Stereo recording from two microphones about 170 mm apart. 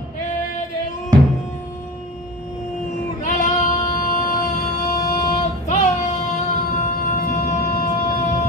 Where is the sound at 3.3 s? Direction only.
50° left (ahead or behind).